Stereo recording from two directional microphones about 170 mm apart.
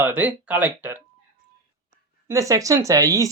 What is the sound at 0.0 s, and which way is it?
Speech, 10° right (ahead or behind).